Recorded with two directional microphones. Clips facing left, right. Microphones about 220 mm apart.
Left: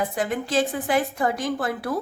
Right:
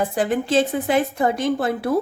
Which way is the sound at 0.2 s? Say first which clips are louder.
Right 5 dB; 30° right (ahead or behind).